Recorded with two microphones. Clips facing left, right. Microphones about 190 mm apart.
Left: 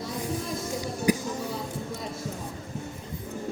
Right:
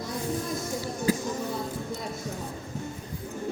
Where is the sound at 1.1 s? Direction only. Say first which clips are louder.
Left 2 dB; 15° left (ahead or behind).